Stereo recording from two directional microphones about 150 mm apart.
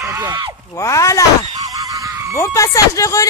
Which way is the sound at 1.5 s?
25° right (ahead or behind).